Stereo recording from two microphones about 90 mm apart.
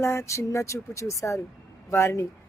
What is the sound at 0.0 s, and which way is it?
Speech, 30° left (ahead or behind).